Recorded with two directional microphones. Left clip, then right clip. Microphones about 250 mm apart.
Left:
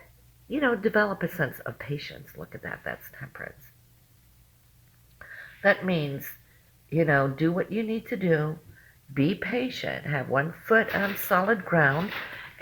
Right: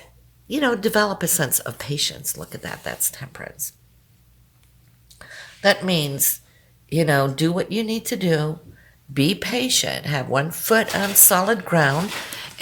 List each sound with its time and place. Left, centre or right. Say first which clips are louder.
0.5 s speech: right 4 dB; right
5.2 s a woman's voice: right 5 dB; right